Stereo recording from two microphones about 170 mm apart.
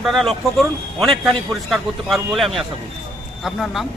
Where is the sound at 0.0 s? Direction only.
Centre (ahead or behind).